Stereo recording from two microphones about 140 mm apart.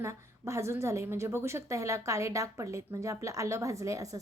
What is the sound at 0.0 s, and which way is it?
A woman's voice, 20° right (ahead or behind).